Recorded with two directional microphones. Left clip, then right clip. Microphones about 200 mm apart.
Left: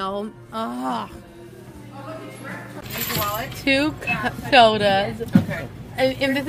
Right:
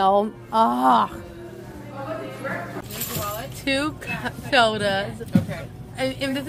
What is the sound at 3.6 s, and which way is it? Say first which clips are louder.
A woman's voice: left 4 dB; 15° left (ahead or behind).